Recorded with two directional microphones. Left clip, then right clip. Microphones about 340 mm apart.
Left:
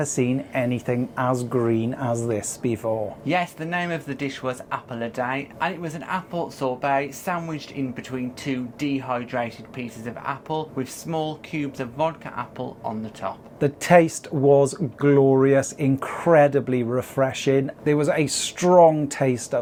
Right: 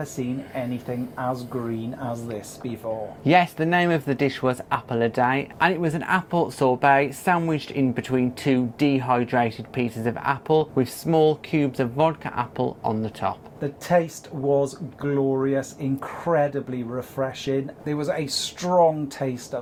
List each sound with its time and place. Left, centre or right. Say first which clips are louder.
0.2 s speech: left 5 dB; left
3.2 s speech: right 8 dB; right
13.6 s speech: left 6 dB; left